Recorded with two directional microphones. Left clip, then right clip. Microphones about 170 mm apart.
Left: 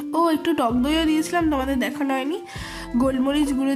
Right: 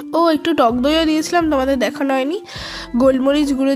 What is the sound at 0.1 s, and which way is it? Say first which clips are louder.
Speech: right 5 dB; 30° right (ahead or behind).